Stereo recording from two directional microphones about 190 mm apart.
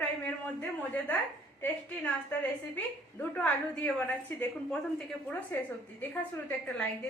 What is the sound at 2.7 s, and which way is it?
A woman's voice, 10° left (ahead or behind).